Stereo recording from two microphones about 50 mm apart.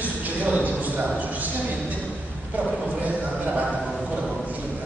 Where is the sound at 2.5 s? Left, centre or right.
Right.